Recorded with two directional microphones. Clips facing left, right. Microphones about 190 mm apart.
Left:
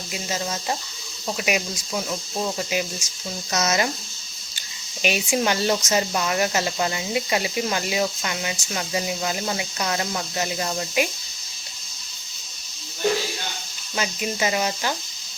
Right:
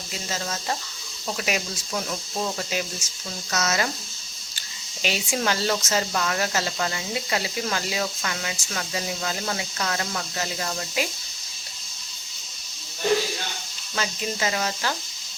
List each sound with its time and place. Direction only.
0.1 s speech: 15° left (ahead or behind)
5.0 s speech: 15° left (ahead or behind)
13.9 s speech: 15° left (ahead or behind)